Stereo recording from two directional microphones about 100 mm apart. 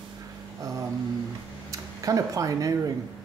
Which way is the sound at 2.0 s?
35° right (ahead or behind).